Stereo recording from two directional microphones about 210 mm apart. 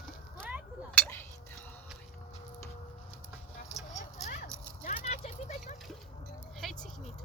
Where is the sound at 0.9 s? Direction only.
5° left (ahead or behind).